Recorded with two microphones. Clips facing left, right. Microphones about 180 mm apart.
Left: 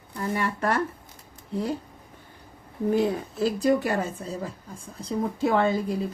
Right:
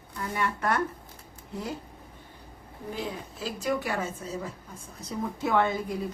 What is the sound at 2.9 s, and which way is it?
A woman's voice, 50° left (ahead or behind).